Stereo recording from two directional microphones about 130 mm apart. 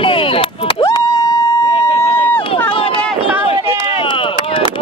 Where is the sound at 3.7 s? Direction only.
40° left (ahead or behind).